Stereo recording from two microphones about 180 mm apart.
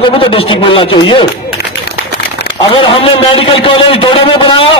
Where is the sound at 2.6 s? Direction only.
30° left (ahead or behind).